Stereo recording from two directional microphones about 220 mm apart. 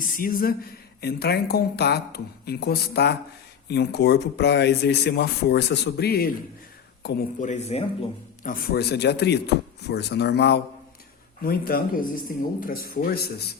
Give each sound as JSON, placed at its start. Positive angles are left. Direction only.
{"t": 0.0, "sound": "speech", "side_deg": 40}
{"t": 7.3, "sound": "speech", "side_deg": 35}
{"t": 8.4, "sound": "speech", "side_deg": 40}